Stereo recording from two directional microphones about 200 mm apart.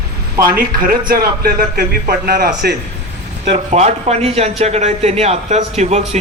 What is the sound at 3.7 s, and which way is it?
A man's voice, 35° right (ahead or behind).